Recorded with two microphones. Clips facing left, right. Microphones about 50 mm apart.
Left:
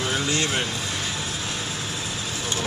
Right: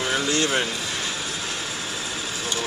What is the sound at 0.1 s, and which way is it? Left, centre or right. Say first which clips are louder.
Speech: right 4 dB; centre.